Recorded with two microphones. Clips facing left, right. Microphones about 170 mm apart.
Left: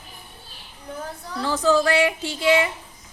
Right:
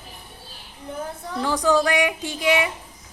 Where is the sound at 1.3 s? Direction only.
15° right (ahead or behind).